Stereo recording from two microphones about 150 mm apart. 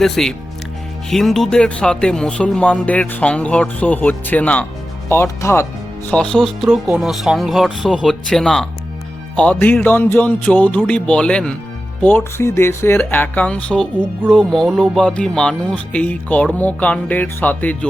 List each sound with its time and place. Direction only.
0.0 s speech: 5° left (ahead or behind)
6.3 s speech: centre (ahead or behind)